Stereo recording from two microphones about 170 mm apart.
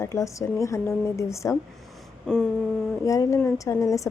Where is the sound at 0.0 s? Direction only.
20° left (ahead or behind).